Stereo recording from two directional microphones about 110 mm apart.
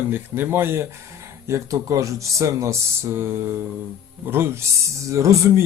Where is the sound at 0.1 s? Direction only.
20° right (ahead or behind).